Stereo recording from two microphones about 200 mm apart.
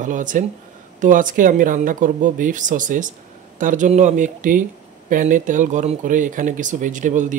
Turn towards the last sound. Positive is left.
turn(degrees=-40)  # may be behind; listen again after turning